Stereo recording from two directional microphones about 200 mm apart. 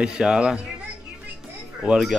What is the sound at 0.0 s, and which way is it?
Speech, 5° right (ahead or behind).